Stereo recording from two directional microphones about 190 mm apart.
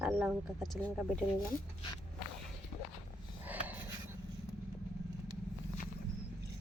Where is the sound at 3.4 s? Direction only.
10° right (ahead or behind).